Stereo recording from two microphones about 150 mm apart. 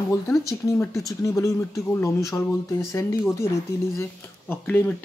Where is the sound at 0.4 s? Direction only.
20° left (ahead or behind).